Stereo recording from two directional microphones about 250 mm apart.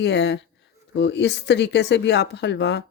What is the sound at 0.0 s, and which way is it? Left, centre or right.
Speech, left.